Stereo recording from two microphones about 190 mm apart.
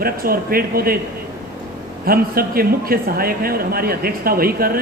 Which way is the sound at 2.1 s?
50° right (ahead or behind).